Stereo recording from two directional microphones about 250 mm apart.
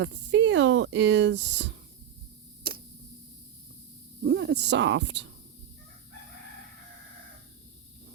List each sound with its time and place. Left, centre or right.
0.0 s speech: right
2.6 s a sound: right
4.2 s speech: right